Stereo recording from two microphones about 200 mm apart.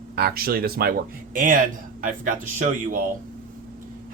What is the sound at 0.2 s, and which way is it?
Speech, 50° right (ahead or behind).